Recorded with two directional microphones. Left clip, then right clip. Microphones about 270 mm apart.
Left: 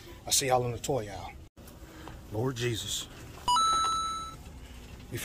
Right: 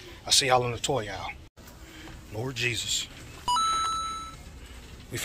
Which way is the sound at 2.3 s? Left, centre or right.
Left.